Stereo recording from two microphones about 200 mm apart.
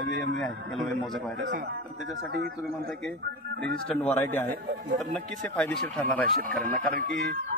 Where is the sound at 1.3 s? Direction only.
55° right (ahead or behind).